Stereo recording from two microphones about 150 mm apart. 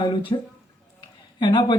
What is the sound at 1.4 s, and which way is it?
Speech, 35° left (ahead or behind).